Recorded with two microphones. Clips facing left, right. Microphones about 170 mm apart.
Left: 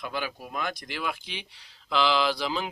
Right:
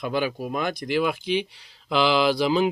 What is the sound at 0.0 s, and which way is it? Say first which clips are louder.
Speech: right 8 dB; 20° right (ahead or behind).